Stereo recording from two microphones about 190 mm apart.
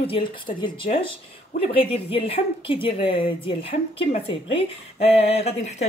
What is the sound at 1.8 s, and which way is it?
Speech, 30° left (ahead or behind).